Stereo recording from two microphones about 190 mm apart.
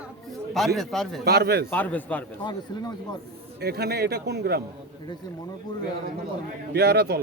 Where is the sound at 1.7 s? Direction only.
10° left (ahead or behind).